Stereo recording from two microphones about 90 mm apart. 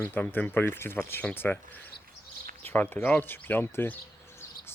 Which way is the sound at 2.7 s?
20° left (ahead or behind).